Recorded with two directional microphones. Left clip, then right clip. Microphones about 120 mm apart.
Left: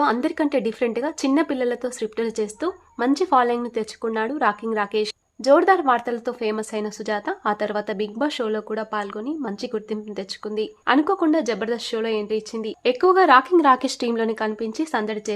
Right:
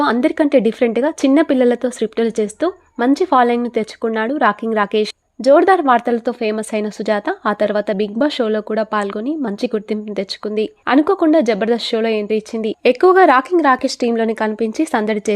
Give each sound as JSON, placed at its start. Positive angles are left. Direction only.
{"t": 0.2, "sound": "speech", "side_deg": -40}
{"t": 1.8, "sound": "speech", "side_deg": -40}
{"t": 4.6, "sound": "speech", "side_deg": -45}
{"t": 5.4, "sound": "speech", "side_deg": -35}
{"t": 6.7, "sound": "speech", "side_deg": -45}
{"t": 11.0, "sound": "speech", "side_deg": -35}
{"t": 13.1, "sound": "speech", "side_deg": -30}
{"t": 13.6, "sound": "a woman's voice", "side_deg": -20}
{"t": 14.3, "sound": "speech", "side_deg": -40}